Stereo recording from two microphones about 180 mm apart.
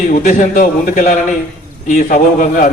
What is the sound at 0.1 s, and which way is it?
A man's voice, 45° left (ahead or behind).